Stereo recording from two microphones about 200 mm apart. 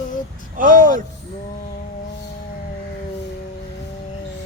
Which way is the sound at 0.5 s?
45° right (ahead or behind).